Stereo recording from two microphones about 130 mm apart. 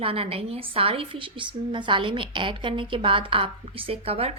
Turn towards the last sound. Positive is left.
turn(degrees=-50)  # may be behind; listen again after turning